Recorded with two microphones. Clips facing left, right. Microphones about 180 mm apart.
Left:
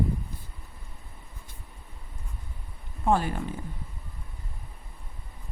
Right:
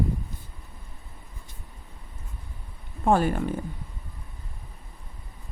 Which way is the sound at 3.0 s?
50° right (ahead or behind).